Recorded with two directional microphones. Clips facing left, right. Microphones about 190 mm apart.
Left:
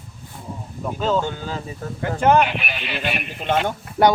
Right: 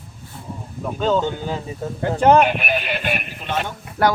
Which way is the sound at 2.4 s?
45° right (ahead or behind).